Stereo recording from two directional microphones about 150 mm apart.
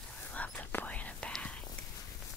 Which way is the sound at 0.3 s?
10° left (ahead or behind).